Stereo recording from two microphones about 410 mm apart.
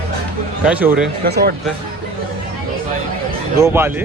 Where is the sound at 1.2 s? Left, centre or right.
Right.